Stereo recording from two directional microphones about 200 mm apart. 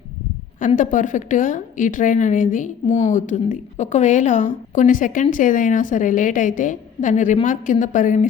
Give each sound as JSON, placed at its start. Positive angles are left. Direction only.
{"t": 0.8, "sound": "a woman's voice", "side_deg": 40}